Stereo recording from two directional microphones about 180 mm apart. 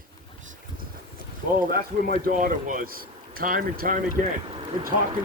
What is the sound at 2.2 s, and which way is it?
Speech, 50° right (ahead or behind).